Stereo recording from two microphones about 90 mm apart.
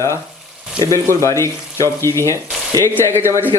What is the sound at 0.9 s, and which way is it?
Speech, 35° left (ahead or behind).